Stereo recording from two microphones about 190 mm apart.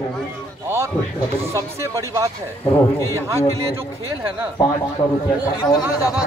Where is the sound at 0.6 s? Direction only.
15° right (ahead or behind).